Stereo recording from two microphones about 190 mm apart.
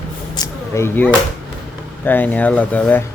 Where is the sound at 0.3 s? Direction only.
15° left (ahead or behind).